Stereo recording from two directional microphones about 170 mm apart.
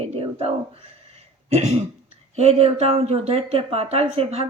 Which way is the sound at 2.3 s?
40° right (ahead or behind).